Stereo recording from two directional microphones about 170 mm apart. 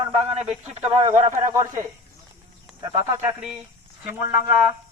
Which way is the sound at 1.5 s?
20° right (ahead or behind).